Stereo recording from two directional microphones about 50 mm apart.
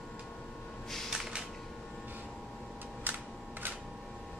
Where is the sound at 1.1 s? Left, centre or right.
Centre.